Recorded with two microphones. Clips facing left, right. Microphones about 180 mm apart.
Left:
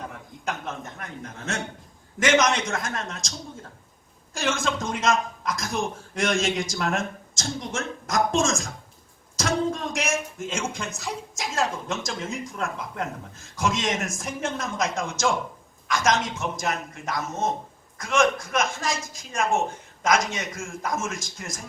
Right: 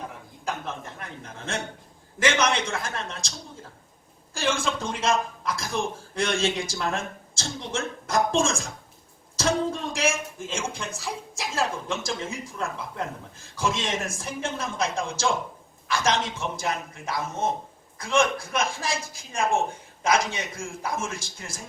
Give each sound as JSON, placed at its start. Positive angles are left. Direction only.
{"t": 0.9, "sound": "a man's voice", "side_deg": -30}
{"t": 4.4, "sound": "a man's voice", "side_deg": -30}
{"t": 9.3, "sound": "a sound", "side_deg": -30}
{"t": 10.5, "sound": "a man's voice", "side_deg": -30}